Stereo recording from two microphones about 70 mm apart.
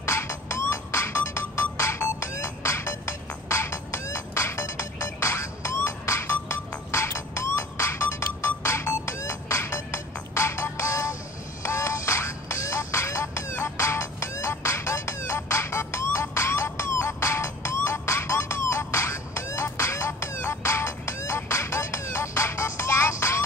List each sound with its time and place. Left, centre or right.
0.0 s music: left